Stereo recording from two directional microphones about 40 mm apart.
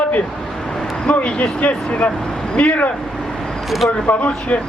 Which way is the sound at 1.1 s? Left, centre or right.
Left.